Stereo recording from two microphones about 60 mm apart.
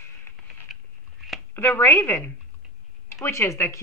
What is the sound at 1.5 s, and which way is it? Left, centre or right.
Speech, left.